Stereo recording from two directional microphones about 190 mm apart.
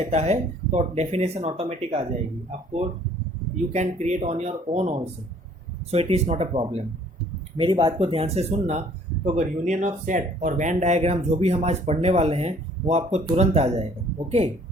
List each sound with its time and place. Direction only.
0.0 s speech: 35° right (ahead or behind)
3.7 s speech: 35° right (ahead or behind)